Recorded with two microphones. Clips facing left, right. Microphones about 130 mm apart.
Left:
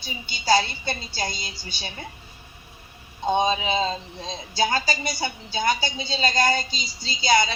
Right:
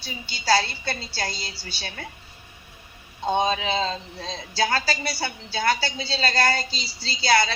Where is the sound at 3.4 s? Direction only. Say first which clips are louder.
Left 1 dB; 15° left (ahead or behind).